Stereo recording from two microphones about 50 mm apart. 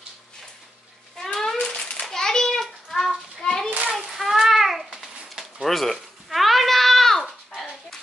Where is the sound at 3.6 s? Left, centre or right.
Right.